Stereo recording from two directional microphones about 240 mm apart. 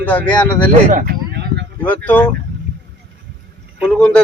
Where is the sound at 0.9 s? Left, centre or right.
Right.